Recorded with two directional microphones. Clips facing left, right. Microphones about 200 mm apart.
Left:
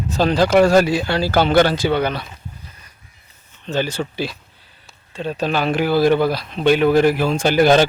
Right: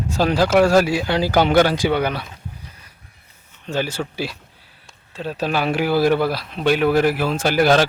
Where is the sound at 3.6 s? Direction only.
10° right (ahead or behind).